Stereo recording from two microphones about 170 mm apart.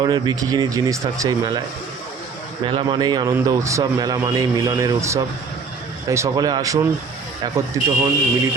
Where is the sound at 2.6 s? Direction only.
30° right (ahead or behind).